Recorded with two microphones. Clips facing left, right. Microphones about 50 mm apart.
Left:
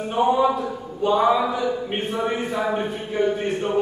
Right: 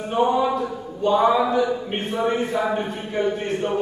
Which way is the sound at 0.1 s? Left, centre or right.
Centre.